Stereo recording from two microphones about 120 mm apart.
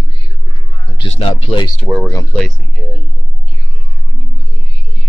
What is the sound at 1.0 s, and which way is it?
Speech, 55° left (ahead or behind).